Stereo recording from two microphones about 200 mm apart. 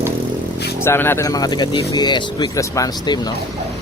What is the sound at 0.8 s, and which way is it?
Speech, 10° left (ahead or behind).